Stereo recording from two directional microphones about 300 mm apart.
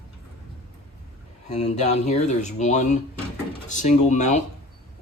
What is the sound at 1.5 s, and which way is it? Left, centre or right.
Speech, left.